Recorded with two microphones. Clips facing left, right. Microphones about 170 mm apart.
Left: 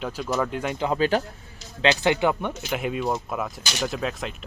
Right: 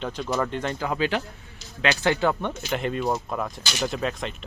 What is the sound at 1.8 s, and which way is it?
Speech, 20° left (ahead or behind).